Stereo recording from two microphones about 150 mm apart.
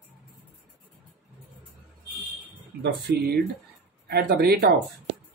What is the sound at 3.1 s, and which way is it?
Speech, 90° right.